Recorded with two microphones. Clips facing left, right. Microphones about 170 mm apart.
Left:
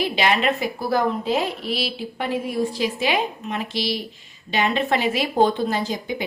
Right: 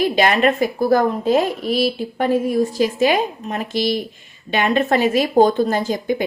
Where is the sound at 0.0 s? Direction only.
45° right (ahead or behind).